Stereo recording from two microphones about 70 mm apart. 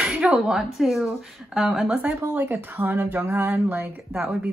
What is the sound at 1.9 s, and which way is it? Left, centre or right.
Speech, right.